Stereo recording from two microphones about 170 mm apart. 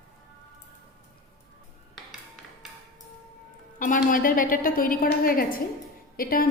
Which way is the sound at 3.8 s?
50° left (ahead or behind).